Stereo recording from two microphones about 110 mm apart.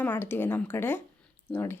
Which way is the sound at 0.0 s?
20° left (ahead or behind).